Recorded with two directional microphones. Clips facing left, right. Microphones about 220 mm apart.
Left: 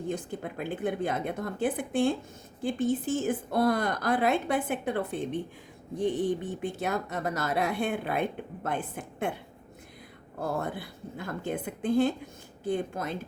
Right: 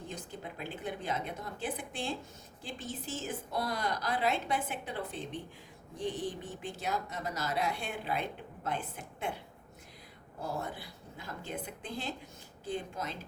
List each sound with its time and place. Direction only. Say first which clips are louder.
0.1 s a woman's voice: left 9 dB; 50° left (ahead or behind)
10.4 s a woman's voice: left 6 dB; 55° left (ahead or behind)